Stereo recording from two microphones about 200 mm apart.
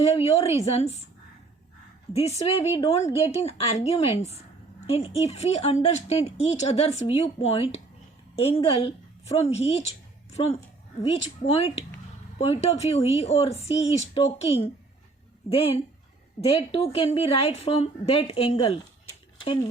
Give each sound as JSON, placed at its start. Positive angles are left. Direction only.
{"t": 0.0, "sound": "speech", "side_deg": 30}
{"t": 2.1, "sound": "a woman's voice", "side_deg": 30}